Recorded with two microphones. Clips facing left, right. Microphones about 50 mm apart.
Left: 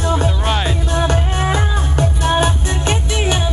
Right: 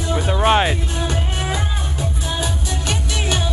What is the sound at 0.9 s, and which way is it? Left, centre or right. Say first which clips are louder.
Music: left 6 dB; left.